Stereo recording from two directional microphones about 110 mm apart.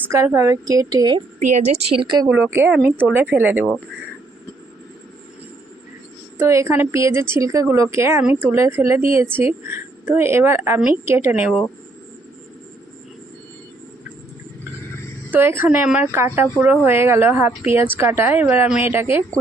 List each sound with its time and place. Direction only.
0.1 s a woman's voice: 25° right (ahead or behind)
1.5 s a woman's voice: 85° right
2.0 s a woman's voice: 45° right (ahead or behind)
2.3 s speech: 20° right (ahead or behind)
6.4 s speech: 25° right (ahead or behind)
15.3 s speech: 20° right (ahead or behind)